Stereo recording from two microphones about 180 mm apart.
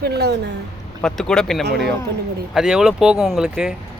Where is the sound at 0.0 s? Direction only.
65° right (ahead or behind).